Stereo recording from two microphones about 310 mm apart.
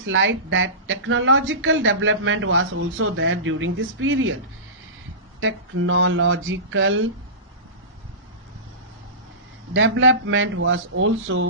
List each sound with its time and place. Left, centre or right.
0.0 s speech: right
5.4 s speech: right
9.7 s speech: right